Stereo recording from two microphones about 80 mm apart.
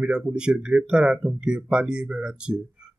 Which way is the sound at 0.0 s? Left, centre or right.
Centre.